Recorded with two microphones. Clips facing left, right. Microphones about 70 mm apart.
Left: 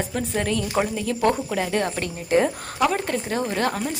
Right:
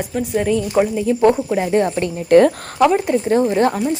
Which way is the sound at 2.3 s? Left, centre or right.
Right.